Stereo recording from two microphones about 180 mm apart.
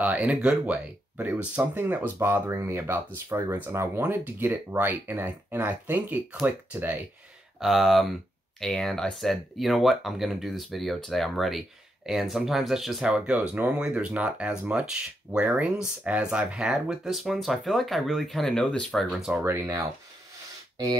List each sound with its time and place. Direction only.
0.0 s speech: 10° right (ahead or behind)
19.4 s speech: 15° right (ahead or behind)